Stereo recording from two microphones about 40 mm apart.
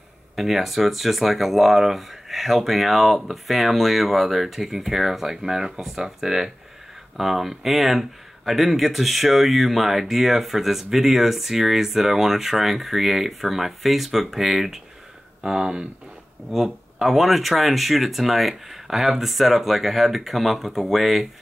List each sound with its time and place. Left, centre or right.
0.4 s speech: centre
16.4 s speech: centre